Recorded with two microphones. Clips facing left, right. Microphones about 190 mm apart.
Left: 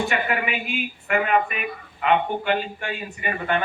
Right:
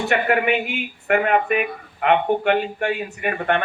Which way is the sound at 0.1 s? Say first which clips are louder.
Right 6 dB; 65° right (ahead or behind).